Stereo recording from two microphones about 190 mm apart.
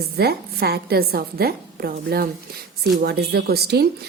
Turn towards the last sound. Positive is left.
turn(degrees=-60)  # may be behind; listen again after turning